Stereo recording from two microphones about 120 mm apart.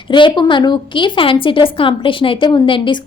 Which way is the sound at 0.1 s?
40° left (ahead or behind).